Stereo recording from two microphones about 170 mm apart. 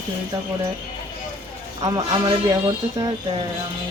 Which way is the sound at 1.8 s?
20° right (ahead or behind).